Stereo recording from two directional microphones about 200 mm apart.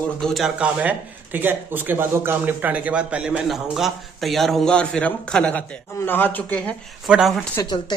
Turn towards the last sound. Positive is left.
turn(degrees=20)  # may be behind; listen again after turning